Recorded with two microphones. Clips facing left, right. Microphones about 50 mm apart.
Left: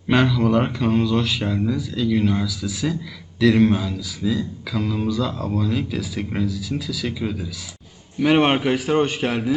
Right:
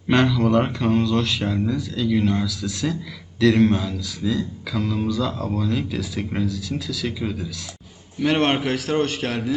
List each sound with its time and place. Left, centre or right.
0.1 s a man's voice: centre